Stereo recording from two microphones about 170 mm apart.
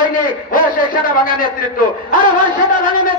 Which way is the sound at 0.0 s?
55° left (ahead or behind).